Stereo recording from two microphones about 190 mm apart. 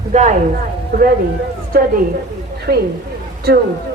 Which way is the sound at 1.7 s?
55° right (ahead or behind).